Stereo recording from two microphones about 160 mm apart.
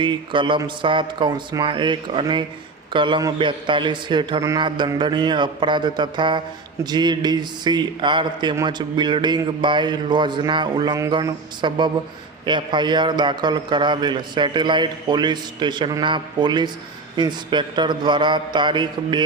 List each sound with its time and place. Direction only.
0.0 s a man's voice: 30° right (ahead or behind)